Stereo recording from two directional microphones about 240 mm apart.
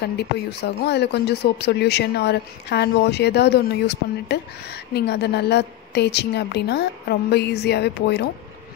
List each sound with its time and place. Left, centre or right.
0.0 s speech: left